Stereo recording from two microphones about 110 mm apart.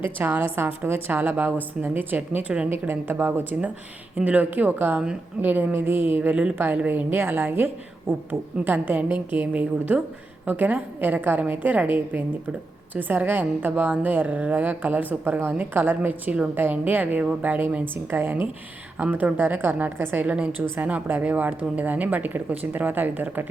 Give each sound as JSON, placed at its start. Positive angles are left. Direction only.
{"t": 0.2, "sound": "a woman's voice", "side_deg": -15}